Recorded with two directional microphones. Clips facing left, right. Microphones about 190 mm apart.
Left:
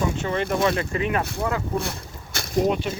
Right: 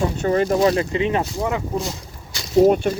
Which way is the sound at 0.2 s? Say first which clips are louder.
Right 7 dB; 40° right (ahead or behind).